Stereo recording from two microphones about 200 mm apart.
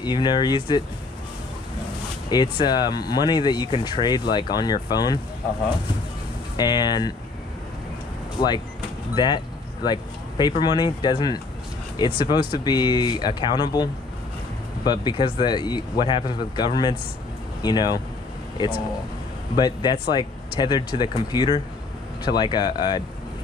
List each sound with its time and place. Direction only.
0.0 s speech: 20° left (ahead or behind)
2.2 s speech: 20° left (ahead or behind)
6.5 s speech: 20° left (ahead or behind)
8.4 s speech: 25° left (ahead or behind)
14.9 s speech: 25° left (ahead or behind)
19.5 s speech: 20° left (ahead or behind)